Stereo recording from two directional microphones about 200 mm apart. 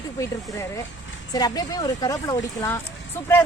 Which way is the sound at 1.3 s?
20° left (ahead or behind).